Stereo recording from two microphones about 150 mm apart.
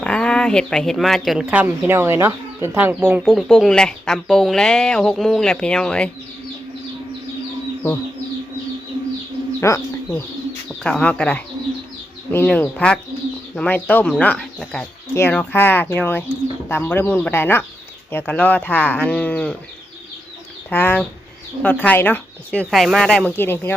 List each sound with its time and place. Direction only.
0.0 s speech: 5° left (ahead or behind)
1.5 s speech: 10° right (ahead or behind); by 6.1 s 5° left (ahead or behind)
9.6 s speech: 20° left (ahead or behind)
10.7 s speech: 5° left (ahead or behind)
20.7 s speech: 10° left (ahead or behind)
22.7 s speech: centre (ahead or behind)